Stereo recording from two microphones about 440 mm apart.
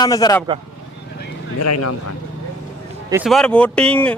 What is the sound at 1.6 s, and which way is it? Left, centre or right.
Speech, left.